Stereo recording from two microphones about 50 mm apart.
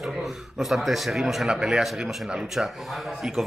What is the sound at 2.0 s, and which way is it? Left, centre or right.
Speech, centre.